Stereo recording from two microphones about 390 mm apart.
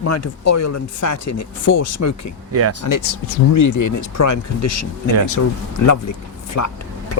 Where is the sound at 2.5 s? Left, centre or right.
Right.